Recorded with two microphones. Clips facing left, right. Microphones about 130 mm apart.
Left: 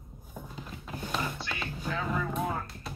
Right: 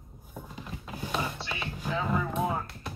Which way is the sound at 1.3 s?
20° right (ahead or behind).